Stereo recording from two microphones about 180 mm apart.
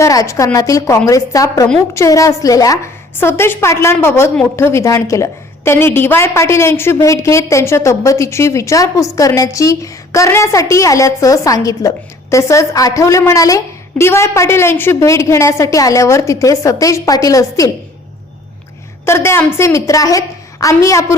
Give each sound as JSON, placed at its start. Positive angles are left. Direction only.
{"t": 0.0, "sound": "a woman's voice", "side_deg": 15}
{"t": 19.0, "sound": "a woman's voice", "side_deg": 15}